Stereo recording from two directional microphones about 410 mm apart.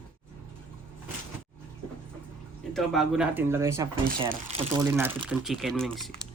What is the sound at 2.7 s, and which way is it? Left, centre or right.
Speech, centre.